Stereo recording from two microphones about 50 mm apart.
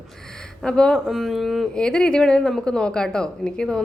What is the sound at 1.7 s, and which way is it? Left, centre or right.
A woman's voice, centre.